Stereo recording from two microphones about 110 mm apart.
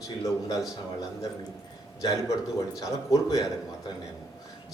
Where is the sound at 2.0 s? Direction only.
30° left (ahead or behind).